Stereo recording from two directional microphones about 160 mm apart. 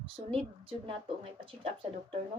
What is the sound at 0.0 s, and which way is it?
A woman's voice, 35° right (ahead or behind).